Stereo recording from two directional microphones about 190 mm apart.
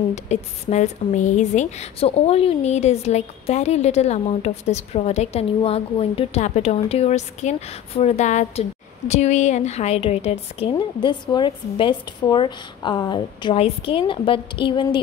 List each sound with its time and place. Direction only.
0.1 s speech: 35° left (ahead or behind)